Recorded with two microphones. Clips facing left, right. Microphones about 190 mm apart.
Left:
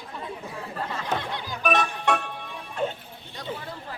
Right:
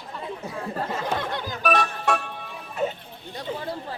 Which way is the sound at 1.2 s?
50° right (ahead or behind).